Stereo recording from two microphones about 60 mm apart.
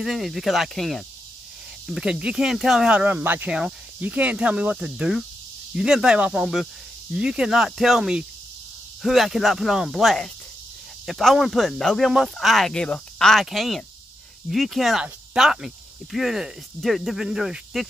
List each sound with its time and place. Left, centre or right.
0.0 s speech: centre
2.0 s speech: centre
4.0 s speech: right; by 12.1 s centre
12.1 s speech: centre